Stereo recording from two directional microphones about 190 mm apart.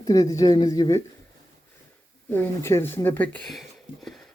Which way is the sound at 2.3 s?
10° left (ahead or behind).